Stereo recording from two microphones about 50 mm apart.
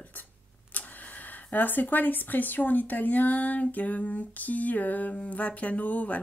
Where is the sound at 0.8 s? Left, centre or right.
Left.